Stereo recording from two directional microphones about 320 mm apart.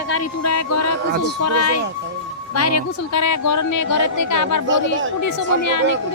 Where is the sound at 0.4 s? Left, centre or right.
Left.